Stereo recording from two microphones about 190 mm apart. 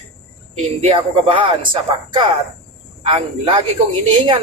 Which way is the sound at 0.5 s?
35° right (ahead or behind).